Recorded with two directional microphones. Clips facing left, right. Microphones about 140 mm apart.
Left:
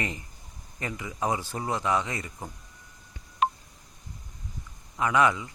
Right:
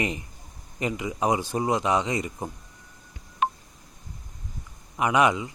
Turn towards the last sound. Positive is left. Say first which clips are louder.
# right 2 dB
turn(degrees=-20)  # may be behind; listen again after turning